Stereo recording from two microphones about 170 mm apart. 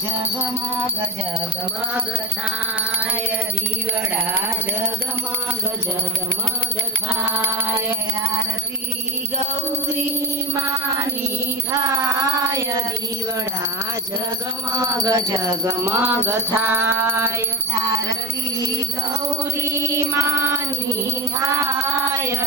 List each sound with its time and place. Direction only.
7.1 s music: 10° right (ahead or behind)
11.8 s a sound: 20° right (ahead or behind)
14.7 s speech: 20° right (ahead or behind)
15.6 s music: 15° right (ahead or behind)
19.6 s music: 15° right (ahead or behind)